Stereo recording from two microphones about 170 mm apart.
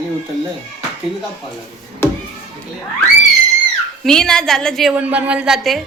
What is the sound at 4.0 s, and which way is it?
Speech, 5° left (ahead or behind).